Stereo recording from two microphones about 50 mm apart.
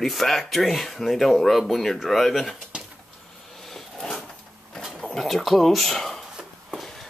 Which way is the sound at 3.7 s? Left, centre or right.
Centre.